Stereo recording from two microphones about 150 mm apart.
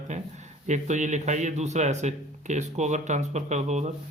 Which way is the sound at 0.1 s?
50° right (ahead or behind).